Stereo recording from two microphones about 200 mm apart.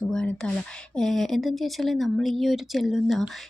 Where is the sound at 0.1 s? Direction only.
5° left (ahead or behind).